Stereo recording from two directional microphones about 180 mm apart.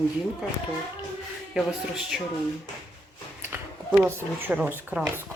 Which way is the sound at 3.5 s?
10° right (ahead or behind).